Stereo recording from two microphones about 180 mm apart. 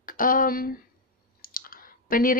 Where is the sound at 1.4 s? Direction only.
55° left (ahead or behind).